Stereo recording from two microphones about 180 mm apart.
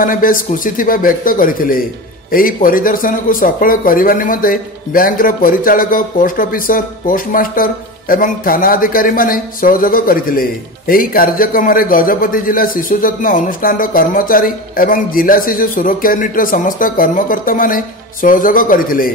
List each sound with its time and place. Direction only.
0.0 s speech: 50° left (ahead or behind)